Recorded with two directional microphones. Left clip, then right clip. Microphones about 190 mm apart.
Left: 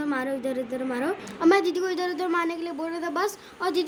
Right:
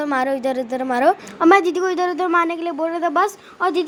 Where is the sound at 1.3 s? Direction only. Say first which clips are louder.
Right 4 dB; 35° right (ahead or behind).